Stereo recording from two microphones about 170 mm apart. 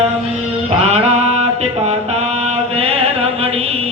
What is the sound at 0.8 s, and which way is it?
Mantra, 40° right (ahead or behind).